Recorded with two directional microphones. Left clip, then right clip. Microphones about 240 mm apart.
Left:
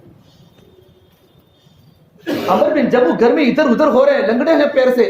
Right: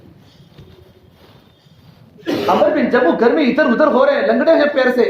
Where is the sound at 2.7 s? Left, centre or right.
Left.